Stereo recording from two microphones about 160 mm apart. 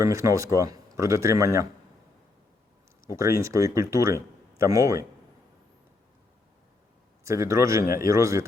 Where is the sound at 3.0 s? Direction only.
20° right (ahead or behind).